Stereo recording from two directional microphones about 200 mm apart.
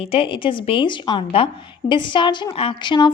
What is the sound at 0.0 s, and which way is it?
A woman's voice, 30° left (ahead or behind).